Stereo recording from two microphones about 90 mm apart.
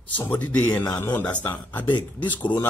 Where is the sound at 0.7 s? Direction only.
40° left (ahead or behind).